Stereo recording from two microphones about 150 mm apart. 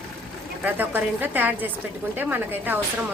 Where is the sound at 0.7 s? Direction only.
10° right (ahead or behind).